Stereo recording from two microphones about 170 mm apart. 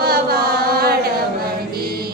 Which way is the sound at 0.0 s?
65° right (ahead or behind).